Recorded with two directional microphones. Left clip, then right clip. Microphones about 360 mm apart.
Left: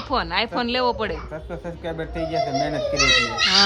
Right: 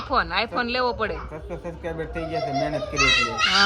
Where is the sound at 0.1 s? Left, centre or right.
Centre.